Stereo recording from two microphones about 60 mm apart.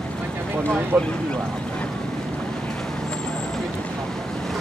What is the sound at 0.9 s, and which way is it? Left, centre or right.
Speech, right.